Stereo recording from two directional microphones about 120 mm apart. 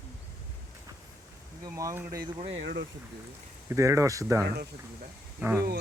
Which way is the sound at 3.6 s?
25° right (ahead or behind).